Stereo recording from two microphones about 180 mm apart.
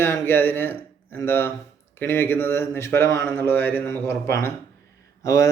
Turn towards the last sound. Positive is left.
turn(degrees=20)  # may be behind; listen again after turning